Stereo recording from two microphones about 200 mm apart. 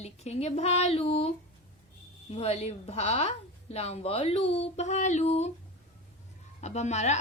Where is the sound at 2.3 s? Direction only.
30° left (ahead or behind).